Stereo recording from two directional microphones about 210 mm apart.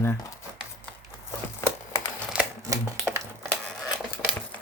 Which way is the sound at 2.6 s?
15° right (ahead or behind).